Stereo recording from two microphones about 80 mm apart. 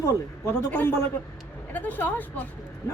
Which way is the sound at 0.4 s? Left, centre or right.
Left.